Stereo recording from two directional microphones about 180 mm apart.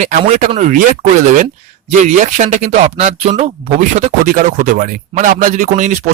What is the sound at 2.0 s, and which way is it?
Speech, 45° right (ahead or behind).